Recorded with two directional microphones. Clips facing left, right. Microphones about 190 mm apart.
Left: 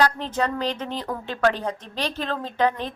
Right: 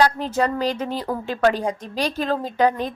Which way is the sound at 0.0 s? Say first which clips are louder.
Right 3 dB; 10° right (ahead or behind).